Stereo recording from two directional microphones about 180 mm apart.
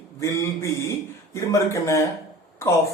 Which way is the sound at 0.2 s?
15° left (ahead or behind).